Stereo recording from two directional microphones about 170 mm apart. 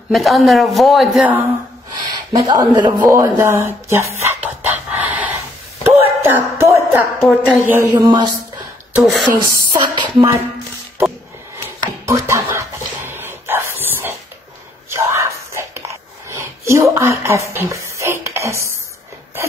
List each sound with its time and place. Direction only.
0.1 s a woman's voice: centre (ahead or behind)
2.0 s a sound: 25° right (ahead or behind)
7.2 s a woman's voice: centre (ahead or behind)
7.6 s speech: 15° right (ahead or behind)
8.9 s a woman's voice: 5° right (ahead or behind)
9.4 s a woman's voice: 20° right (ahead or behind)
11.8 s a sound: 15° right (ahead or behind)
14.9 s dog: 15° right (ahead or behind)